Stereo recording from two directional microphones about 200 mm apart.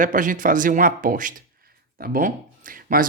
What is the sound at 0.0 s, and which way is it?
Speech, 40° right (ahead or behind).